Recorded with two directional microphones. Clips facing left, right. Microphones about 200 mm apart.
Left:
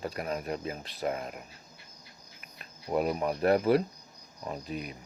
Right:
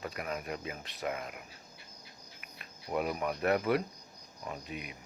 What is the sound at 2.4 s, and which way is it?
Cricket, 35° left (ahead or behind).